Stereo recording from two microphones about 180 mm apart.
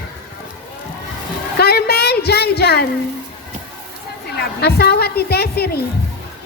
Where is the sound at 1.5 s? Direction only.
60° left (ahead or behind).